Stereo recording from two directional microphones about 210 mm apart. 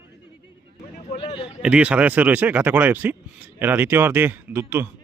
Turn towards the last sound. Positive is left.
turn(degrees=-10)  # may be behind; listen again after turning